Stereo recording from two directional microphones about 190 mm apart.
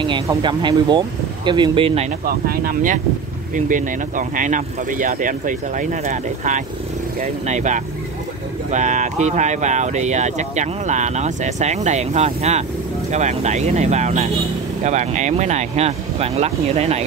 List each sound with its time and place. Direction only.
0.0 s speech: 25° right (ahead or behind)
2.2 s speech: 50° right (ahead or behind); by 17.0 s 35° right (ahead or behind)